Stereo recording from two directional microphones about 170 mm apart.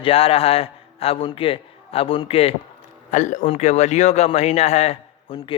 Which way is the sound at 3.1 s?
45° left (ahead or behind).